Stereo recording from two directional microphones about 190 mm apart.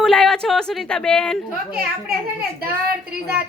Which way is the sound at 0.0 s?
5° left (ahead or behind).